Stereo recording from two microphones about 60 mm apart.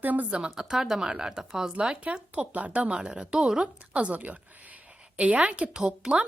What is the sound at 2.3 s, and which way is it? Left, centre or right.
A woman's voice, right.